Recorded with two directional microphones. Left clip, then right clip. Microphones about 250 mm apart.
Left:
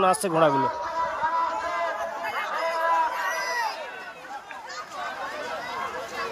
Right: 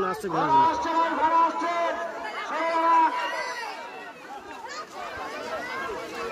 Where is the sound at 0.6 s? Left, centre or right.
Right.